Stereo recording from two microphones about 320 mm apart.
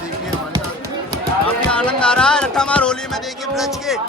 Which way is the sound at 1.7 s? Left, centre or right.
Centre.